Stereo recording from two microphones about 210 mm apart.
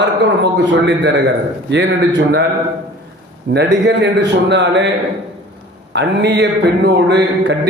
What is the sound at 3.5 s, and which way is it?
A man's voice, 55° right (ahead or behind).